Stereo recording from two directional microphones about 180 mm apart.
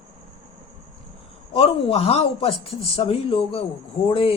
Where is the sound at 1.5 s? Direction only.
30° left (ahead or behind).